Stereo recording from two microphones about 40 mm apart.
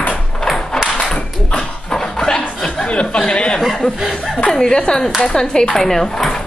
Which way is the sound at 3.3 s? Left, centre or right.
Left.